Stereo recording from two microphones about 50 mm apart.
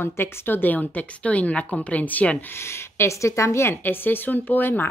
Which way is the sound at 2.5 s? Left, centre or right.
Left.